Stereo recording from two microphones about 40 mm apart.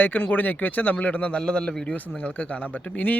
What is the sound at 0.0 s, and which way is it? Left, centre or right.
Speech, left.